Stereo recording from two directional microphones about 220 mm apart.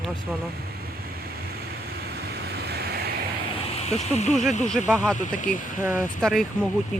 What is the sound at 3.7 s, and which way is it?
Speech, 30° left (ahead or behind).